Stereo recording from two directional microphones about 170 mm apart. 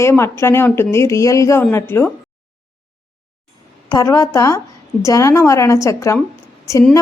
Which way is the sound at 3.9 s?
20° left (ahead or behind).